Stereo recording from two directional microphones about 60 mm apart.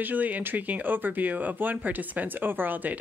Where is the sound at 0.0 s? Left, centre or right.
Right.